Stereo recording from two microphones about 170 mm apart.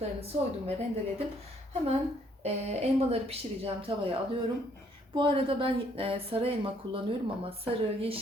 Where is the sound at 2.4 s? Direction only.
40° right (ahead or behind).